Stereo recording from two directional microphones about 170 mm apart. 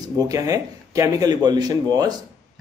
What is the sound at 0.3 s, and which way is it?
Speech, 20° right (ahead or behind).